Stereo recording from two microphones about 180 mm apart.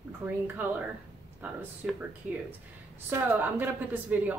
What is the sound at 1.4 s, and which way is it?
Speech, 10° right (ahead or behind).